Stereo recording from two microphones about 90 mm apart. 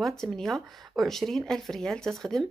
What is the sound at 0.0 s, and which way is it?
Speech, 5° left (ahead or behind).